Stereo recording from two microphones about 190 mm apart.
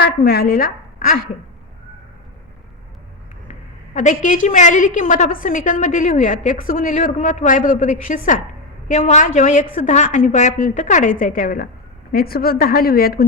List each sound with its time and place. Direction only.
0.3 s a woman's voice: 55° left (ahead or behind)
3.9 s a woman's voice: 40° left (ahead or behind)